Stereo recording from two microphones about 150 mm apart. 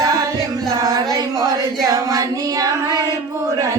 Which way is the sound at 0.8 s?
25° right (ahead or behind).